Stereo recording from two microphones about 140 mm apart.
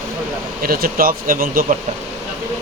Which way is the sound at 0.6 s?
90° right.